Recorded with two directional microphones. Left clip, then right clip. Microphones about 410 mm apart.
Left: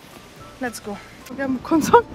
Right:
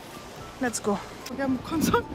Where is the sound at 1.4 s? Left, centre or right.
Centre.